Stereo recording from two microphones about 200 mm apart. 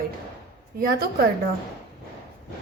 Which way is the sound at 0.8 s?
50° right (ahead or behind).